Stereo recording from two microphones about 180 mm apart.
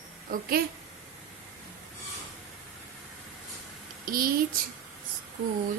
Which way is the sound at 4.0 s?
55° right (ahead or behind).